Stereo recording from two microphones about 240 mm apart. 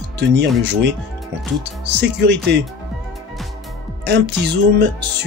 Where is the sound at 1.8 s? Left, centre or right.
Right.